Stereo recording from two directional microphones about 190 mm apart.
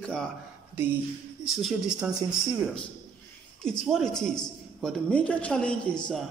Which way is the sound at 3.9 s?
Centre (ahead or behind).